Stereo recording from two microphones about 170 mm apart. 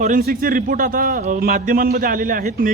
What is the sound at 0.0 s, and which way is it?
A man's voice, 55° right (ahead or behind).